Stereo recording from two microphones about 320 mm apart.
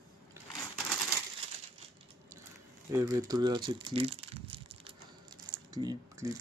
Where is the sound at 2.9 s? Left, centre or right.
Centre.